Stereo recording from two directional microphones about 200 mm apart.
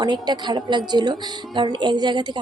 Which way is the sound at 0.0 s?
20° right (ahead or behind).